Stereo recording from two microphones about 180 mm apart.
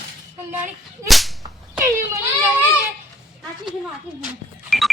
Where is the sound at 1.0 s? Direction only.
Centre (ahead or behind).